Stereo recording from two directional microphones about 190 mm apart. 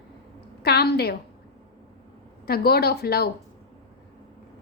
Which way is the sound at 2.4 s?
55° left (ahead or behind).